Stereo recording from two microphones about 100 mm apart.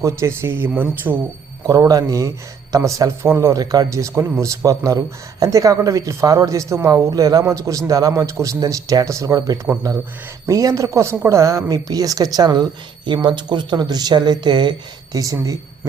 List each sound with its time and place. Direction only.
0.0 s speech: 30° right (ahead or behind)
1.6 s a man's voice: 40° right (ahead or behind)
15.2 s a man's voice: 35° right (ahead or behind)